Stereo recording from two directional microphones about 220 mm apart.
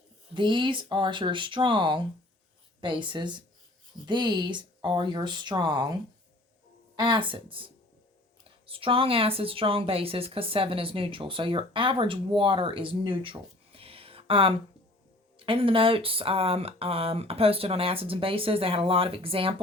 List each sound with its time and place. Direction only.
0.3 s a woman's voice: 20° right (ahead or behind)